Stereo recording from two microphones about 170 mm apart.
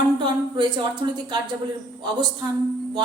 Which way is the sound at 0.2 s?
25° right (ahead or behind).